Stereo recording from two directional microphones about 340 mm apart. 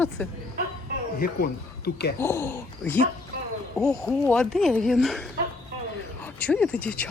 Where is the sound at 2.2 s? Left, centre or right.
Centre.